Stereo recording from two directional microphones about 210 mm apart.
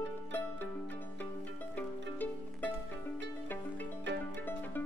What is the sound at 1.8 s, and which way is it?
Music, 10° left (ahead or behind).